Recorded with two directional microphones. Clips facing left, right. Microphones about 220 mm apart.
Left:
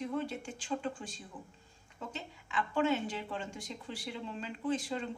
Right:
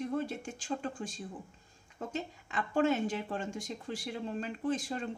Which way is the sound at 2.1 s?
45° right (ahead or behind).